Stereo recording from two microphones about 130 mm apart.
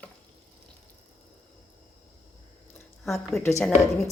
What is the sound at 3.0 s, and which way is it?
Speech, centre (ahead or behind).